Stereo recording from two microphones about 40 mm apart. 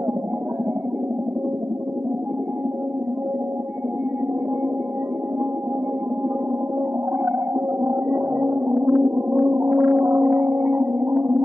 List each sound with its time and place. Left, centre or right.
7.8 s whale vocalization: right
9.5 s music: right